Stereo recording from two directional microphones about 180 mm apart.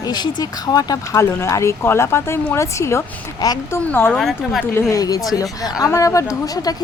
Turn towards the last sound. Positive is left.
turn(degrees=20)  # may be behind; listen again after turning